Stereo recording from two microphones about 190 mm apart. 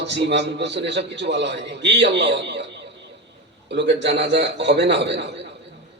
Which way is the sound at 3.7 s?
65° right (ahead or behind).